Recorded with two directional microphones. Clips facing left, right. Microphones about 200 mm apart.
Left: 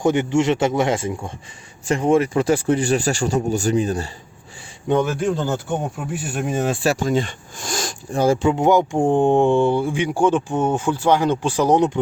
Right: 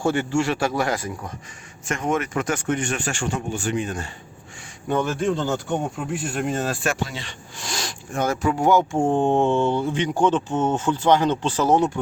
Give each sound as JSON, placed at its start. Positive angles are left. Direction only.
{"t": 0.0, "sound": "a man's voice", "side_deg": 20}
{"t": 4.9, "sound": "speech", "side_deg": 10}
{"t": 6.8, "sound": "speech", "side_deg": 40}
{"t": 8.1, "sound": "speech", "side_deg": 30}